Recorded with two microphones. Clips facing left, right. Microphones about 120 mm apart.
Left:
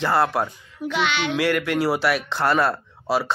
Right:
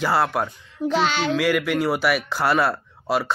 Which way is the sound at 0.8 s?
35° right (ahead or behind).